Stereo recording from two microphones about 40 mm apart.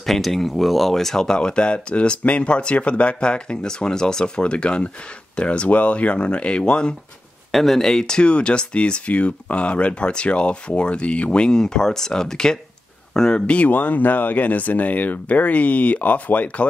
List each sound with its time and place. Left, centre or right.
0.0 s speech: centre; by 7.0 s left
7.5 s speech: centre
13.5 s speech: left